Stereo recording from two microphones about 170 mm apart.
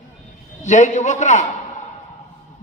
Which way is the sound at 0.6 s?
45° left (ahead or behind).